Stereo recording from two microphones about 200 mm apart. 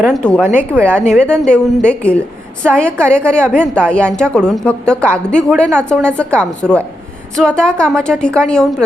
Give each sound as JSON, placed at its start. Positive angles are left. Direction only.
{"t": 0.0, "sound": "a woman's voice", "side_deg": 0}